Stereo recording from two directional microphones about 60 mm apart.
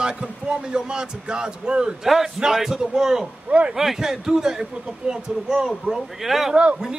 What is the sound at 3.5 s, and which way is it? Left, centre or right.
Speech, centre.